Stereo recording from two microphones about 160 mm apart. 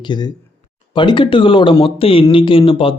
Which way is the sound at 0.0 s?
25° left (ahead or behind).